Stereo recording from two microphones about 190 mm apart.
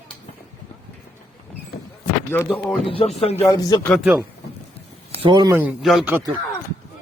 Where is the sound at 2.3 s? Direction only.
10° left (ahead or behind).